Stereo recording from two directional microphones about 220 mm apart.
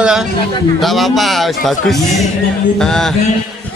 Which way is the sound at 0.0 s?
5° right (ahead or behind).